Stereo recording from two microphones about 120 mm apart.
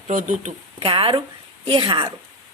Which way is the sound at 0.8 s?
50° right (ahead or behind).